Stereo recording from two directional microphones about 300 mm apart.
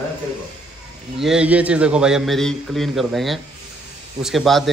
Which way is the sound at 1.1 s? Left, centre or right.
Centre.